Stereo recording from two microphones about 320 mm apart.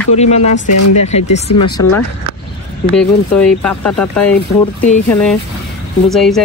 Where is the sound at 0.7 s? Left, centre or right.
Left.